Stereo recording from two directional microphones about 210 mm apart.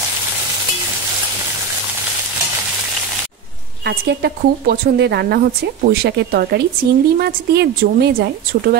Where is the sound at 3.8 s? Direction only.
50° right (ahead or behind).